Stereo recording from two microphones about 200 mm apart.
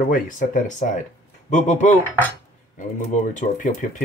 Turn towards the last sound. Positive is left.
turn(degrees=40)  # may be behind; listen again after turning